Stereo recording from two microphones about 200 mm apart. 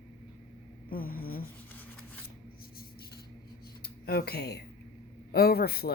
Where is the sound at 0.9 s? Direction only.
45° left (ahead or behind).